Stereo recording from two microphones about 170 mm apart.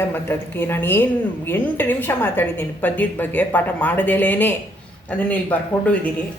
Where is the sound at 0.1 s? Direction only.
10° left (ahead or behind).